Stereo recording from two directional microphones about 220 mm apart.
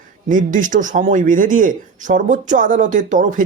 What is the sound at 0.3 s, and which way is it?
Speech, 35° right (ahead or behind).